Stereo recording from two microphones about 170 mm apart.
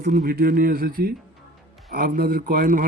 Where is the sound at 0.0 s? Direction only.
60° right (ahead or behind).